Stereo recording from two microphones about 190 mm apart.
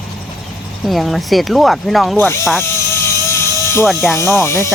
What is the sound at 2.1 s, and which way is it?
Speech, 10° left (ahead or behind).